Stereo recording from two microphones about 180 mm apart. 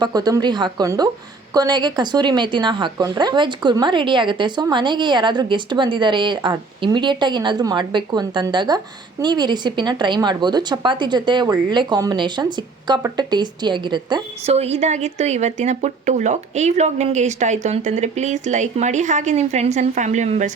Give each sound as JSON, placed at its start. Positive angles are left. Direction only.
{"t": 0.0, "sound": "a woman's voice", "side_deg": -20}